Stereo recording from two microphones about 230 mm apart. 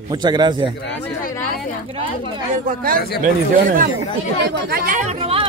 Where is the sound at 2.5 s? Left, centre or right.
Right.